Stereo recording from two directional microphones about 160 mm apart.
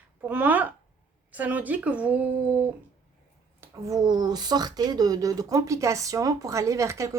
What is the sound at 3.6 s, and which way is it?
Speech, 20° right (ahead or behind).